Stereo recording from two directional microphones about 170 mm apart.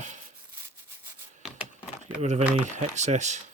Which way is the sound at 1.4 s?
5° right (ahead or behind).